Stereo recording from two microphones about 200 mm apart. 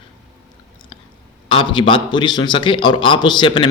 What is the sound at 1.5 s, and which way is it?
A man's voice, 25° left (ahead or behind).